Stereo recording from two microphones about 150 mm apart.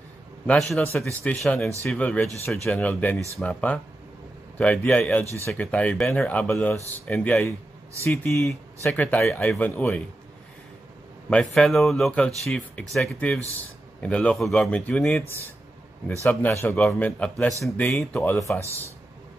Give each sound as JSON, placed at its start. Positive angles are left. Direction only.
{"t": 0.5, "sound": "speech", "side_deg": 5}
{"t": 1.4, "sound": "speech", "side_deg": 0}
{"t": 8.0, "sound": "speech", "side_deg": 15}
{"t": 11.2, "sound": "speech", "side_deg": 5}
{"t": 16.2, "sound": "speech", "side_deg": 15}